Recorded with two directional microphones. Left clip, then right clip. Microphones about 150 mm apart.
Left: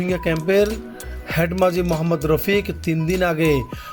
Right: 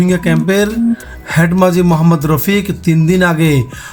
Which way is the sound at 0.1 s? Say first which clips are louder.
Right 5 dB; 25° left (ahead or behind).